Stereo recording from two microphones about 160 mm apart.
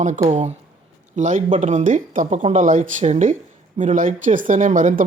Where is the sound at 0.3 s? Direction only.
45° right (ahead or behind).